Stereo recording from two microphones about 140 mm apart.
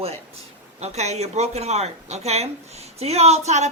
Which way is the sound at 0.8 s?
50° right (ahead or behind).